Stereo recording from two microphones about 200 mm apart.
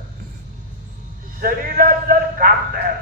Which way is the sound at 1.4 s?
45° right (ahead or behind).